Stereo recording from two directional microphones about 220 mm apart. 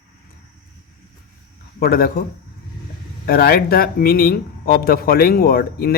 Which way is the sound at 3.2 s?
45° left (ahead or behind).